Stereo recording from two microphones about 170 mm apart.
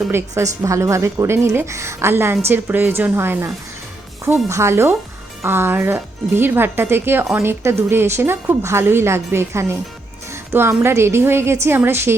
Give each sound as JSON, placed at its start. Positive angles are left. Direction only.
{"t": 0.1, "sound": "a woman's voice", "side_deg": -15}